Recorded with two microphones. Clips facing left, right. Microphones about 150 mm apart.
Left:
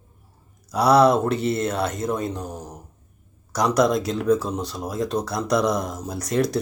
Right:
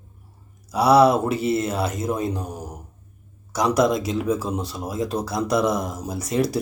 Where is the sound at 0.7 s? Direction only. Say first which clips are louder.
Right 1 dB; 5° right (ahead or behind).